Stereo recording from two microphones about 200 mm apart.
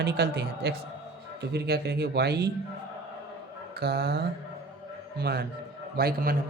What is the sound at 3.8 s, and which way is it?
A man's voice, 55° right (ahead or behind).